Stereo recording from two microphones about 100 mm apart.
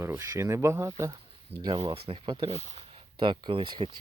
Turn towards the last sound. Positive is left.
turn(degrees=-55)  # may be behind; listen again after turning